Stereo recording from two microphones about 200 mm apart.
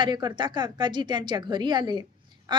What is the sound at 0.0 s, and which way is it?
Speech, 20° right (ahead or behind).